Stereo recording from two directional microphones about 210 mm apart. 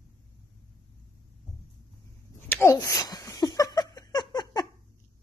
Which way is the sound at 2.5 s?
10° left (ahead or behind).